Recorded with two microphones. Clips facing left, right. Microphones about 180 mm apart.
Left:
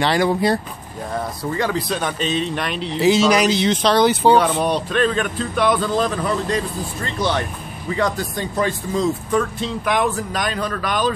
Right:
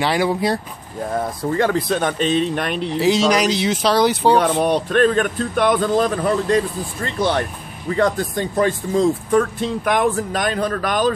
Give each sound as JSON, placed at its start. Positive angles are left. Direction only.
{"t": 0.0, "sound": "speech", "side_deg": -5}
{"t": 1.1, "sound": "speech", "side_deg": -50}
{"t": 3.0, "sound": "speech", "side_deg": 5}
{"t": 4.4, "sound": "speech", "side_deg": -50}